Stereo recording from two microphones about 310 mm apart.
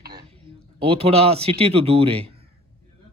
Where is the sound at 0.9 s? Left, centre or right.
Centre.